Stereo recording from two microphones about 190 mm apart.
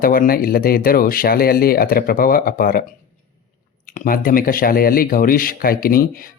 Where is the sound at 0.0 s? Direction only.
50° left (ahead or behind).